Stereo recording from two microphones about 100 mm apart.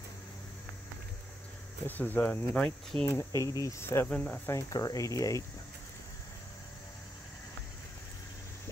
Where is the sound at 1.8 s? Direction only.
20° left (ahead or behind).